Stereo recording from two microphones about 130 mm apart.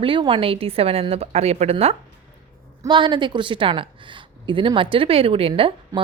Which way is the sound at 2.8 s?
35° right (ahead or behind).